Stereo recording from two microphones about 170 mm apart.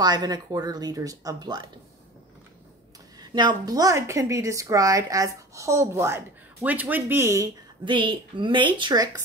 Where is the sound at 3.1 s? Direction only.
25° right (ahead or behind).